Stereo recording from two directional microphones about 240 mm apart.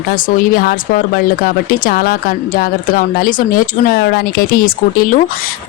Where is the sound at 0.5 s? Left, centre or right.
Left.